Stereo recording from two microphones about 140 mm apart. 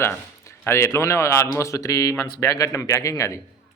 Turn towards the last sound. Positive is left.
turn(degrees=20)  # may be behind; listen again after turning